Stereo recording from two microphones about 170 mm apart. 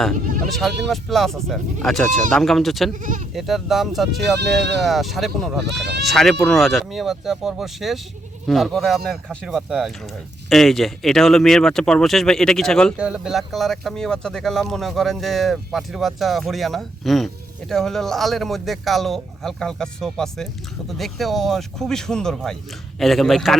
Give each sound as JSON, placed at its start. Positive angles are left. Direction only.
{"t": 0.9, "sound": "speech", "side_deg": 0}
{"t": 2.9, "sound": "speech", "side_deg": -50}
{"t": 3.3, "sound": "speech", "side_deg": 0}